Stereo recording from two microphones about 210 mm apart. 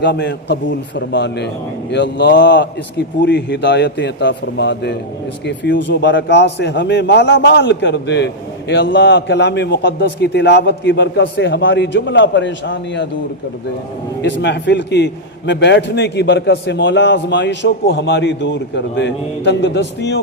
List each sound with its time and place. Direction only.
0.0 s a man's voice: 55° left (ahead or behind)
14.2 s a man's voice: 55° left (ahead or behind)